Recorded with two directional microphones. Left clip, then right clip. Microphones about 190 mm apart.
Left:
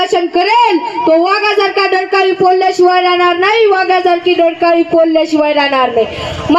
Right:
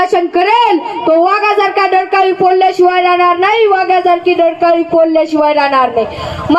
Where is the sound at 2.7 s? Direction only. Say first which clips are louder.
Even; 50° left (ahead or behind).